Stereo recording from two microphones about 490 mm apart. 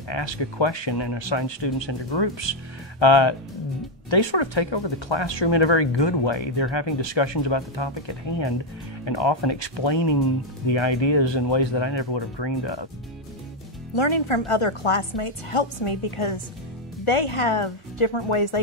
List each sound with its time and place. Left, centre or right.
0.1 s speech: left
13.9 s a woman's voice: left